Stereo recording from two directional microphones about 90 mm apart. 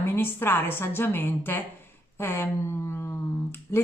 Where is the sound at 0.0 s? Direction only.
25° left (ahead or behind).